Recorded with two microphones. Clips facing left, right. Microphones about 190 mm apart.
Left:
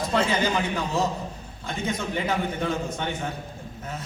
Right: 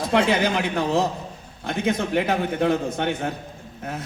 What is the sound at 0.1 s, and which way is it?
A man's voice, 65° right (ahead or behind).